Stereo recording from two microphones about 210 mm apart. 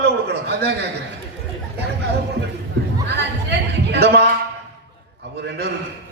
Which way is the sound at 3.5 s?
55° right (ahead or behind).